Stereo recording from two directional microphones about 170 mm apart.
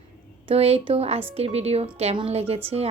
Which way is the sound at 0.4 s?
35° right (ahead or behind).